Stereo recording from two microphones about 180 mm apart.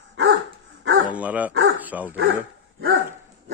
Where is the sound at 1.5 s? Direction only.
90° right.